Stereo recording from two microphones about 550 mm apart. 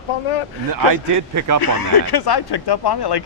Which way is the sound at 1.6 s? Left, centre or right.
Left.